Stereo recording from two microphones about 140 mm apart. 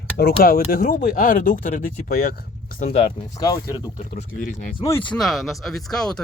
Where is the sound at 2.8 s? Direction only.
50° left (ahead or behind).